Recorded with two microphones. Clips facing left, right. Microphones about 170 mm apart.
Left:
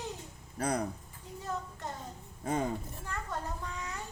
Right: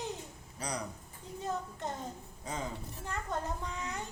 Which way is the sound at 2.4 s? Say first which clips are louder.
Left 8 dB; 55° left (ahead or behind).